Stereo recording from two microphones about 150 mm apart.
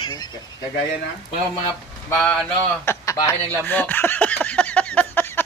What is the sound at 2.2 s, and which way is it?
Speech, 5° left (ahead or behind).